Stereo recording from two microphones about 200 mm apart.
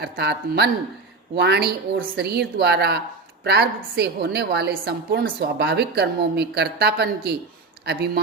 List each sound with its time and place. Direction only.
0.0 s a woman's voice: 55° right (ahead or behind)